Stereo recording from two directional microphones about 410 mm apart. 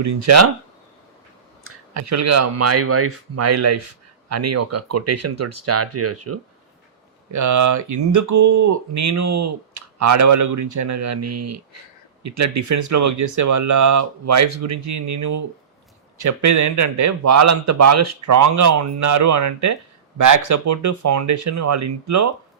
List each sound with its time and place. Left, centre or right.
0.0 s speech: right
1.6 s a man's voice: right